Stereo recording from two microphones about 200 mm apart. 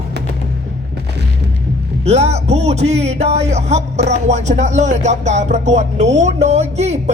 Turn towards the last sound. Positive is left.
turn(degrees=-35)  # may be behind; listen again after turning